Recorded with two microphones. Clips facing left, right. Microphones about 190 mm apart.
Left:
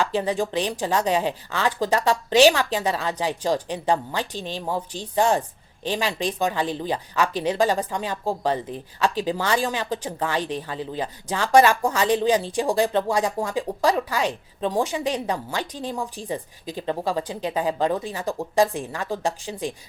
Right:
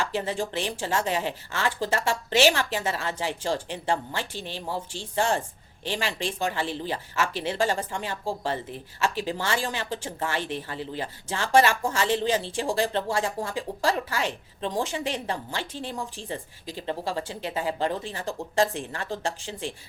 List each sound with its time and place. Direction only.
0.1 s a woman's voice: 15° left (ahead or behind)
9.1 s a woman's voice: 15° left (ahead or behind)